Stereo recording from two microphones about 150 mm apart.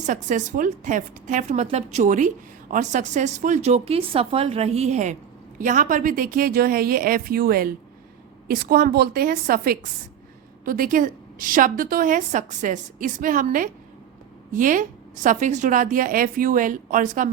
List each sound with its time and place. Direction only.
0.0 s a woman's voice: 55° right (ahead or behind)
5.5 s a woman's voice: 60° right (ahead or behind)